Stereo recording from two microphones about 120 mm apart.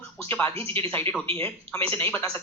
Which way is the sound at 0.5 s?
50° right (ahead or behind).